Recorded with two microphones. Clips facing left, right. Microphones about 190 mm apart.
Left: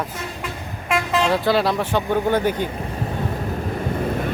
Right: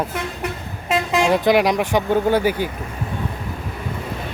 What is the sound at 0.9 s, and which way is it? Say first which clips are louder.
Vehicle: right 2 dB; 20° right (ahead or behind).